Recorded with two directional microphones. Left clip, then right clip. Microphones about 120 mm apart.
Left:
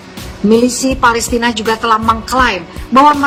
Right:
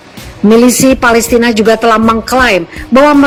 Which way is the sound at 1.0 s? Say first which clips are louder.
Even; 30° right (ahead or behind).